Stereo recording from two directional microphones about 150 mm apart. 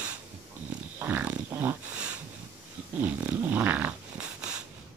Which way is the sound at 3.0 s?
10° right (ahead or behind).